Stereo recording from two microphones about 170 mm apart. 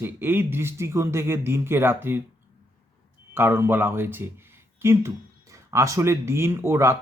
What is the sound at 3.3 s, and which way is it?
A man's voice, 15° right (ahead or behind).